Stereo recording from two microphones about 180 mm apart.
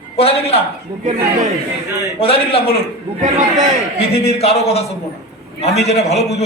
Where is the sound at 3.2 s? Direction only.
40° right (ahead or behind).